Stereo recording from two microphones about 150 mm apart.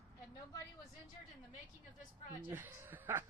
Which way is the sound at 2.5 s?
15° right (ahead or behind).